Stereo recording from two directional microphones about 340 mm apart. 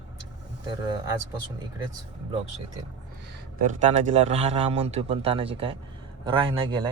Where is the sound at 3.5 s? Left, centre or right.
Right.